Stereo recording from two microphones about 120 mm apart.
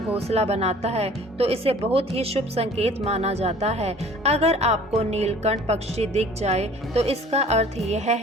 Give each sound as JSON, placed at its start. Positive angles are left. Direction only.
{"t": 0.3, "sound": "speech", "side_deg": -60}